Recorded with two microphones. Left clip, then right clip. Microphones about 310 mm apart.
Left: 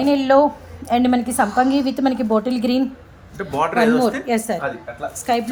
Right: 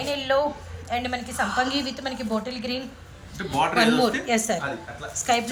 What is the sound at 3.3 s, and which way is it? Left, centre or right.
A woman's voice, centre.